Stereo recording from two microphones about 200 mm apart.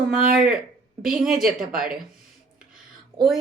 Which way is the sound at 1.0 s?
45° right (ahead or behind).